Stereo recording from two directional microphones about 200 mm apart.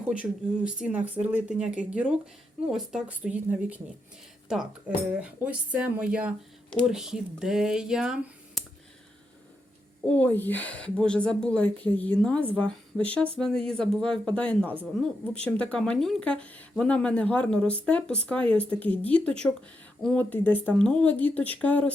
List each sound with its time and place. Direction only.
0.0 s speech: 5° right (ahead or behind)
5.1 s speech: 5° right (ahead or behind)
10.1 s a woman's voice: 10° left (ahead or behind)
14.6 s speech: 10° right (ahead or behind)
15.4 s a woman's voice: 5° left (ahead or behind)